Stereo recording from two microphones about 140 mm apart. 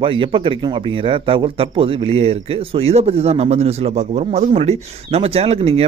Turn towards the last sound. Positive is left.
turn(degrees=-45)  # may be behind; listen again after turning